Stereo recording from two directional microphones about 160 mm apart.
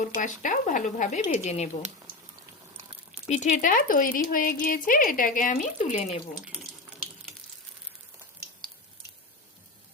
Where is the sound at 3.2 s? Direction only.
45° left (ahead or behind).